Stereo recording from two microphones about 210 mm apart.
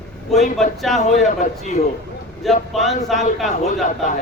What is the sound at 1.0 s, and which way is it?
Speech, 35° left (ahead or behind).